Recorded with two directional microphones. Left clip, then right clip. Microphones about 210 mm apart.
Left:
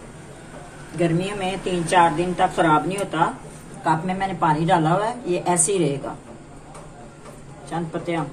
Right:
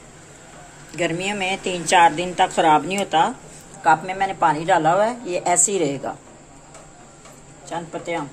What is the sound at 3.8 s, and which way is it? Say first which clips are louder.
A woman's voice: right 4 dB; 40° right (ahead or behind).